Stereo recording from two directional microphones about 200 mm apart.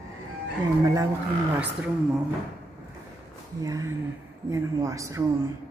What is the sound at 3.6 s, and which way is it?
A woman's voice, 15° right (ahead or behind).